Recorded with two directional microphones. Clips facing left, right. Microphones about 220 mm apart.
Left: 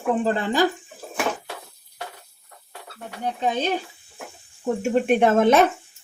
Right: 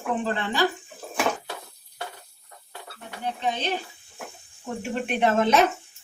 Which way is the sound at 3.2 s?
45° left (ahead or behind).